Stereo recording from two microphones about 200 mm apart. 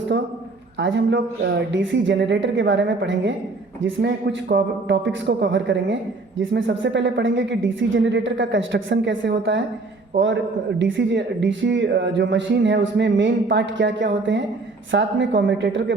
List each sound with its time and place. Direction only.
0.8 s a man's voice: 65° right (ahead or behind)